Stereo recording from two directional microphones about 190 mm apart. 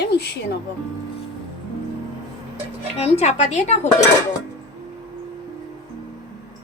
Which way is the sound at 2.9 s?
35° left (ahead or behind).